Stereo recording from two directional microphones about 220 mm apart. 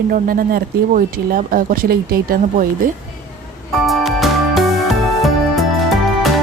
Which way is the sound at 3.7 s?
Centre (ahead or behind).